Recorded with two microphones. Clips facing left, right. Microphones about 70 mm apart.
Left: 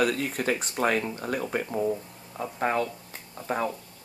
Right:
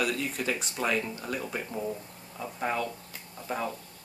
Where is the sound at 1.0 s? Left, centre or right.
Left.